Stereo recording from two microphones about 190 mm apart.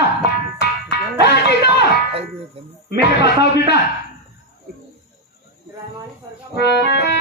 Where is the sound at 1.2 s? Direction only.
60° left (ahead or behind).